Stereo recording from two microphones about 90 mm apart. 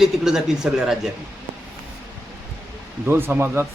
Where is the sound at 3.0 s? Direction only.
25° right (ahead or behind).